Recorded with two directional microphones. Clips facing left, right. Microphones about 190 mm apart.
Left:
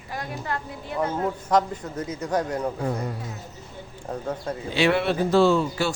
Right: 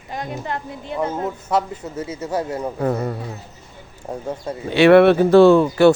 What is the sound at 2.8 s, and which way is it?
Speech, 55° right (ahead or behind).